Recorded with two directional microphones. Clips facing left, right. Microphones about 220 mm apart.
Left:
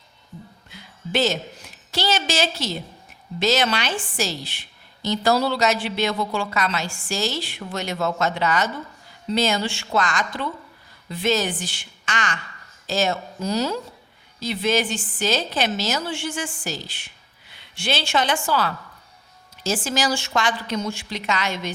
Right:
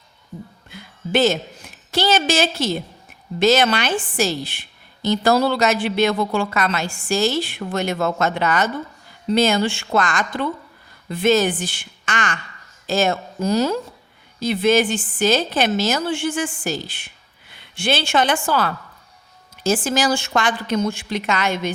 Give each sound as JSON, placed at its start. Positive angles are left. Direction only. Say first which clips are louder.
{"t": 0.7, "sound": "a woman's voice", "louder": "right 5 dB", "side_deg": -55}